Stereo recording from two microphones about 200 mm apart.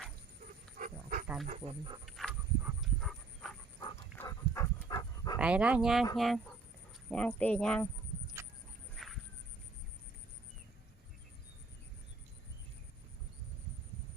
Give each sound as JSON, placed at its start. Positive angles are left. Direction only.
{"t": 0.8, "sound": "wild animals", "side_deg": -45}
{"t": 1.5, "sound": "speech", "side_deg": -30}
{"t": 2.0, "sound": "livestock", "side_deg": 0}
{"t": 4.2, "sound": "dog", "side_deg": 15}
{"t": 5.4, "sound": "speech", "side_deg": -5}
{"t": 9.0, "sound": "a sound", "side_deg": 0}